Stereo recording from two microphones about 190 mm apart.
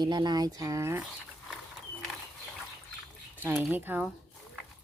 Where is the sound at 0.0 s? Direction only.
20° right (ahead or behind).